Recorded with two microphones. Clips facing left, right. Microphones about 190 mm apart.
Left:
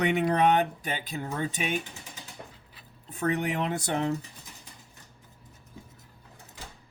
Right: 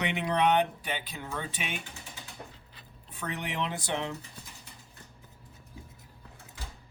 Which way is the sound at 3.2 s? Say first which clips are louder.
Left 7 dB; 45° left (ahead or behind).